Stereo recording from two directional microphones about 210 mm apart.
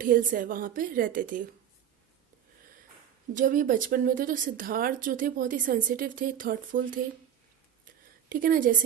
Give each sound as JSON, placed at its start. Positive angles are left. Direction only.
{"t": 0.0, "sound": "speech", "side_deg": -40}
{"t": 3.3, "sound": "speech", "side_deg": -40}
{"t": 7.9, "sound": "a sound", "side_deg": -40}